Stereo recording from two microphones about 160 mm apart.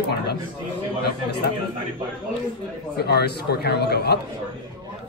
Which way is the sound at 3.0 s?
90° left.